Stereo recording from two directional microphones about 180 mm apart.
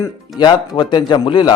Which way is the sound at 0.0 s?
20° left (ahead or behind).